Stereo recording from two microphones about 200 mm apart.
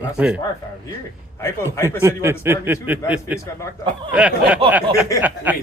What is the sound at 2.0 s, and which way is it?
Speech, 15° right (ahead or behind).